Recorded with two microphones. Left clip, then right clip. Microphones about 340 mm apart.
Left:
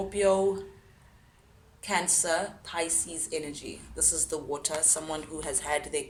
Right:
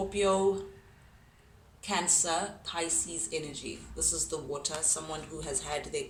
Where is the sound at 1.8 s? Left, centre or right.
Centre.